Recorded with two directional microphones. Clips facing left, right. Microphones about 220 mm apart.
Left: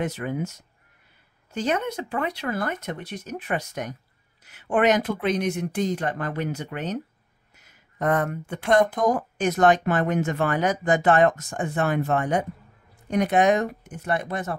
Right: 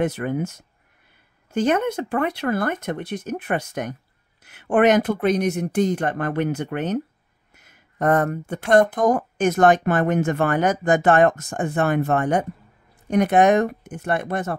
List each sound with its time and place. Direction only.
0.0 s speech: 50° right (ahead or behind)